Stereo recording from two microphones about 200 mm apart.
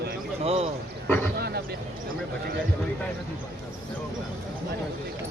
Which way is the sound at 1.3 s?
50° right (ahead or behind).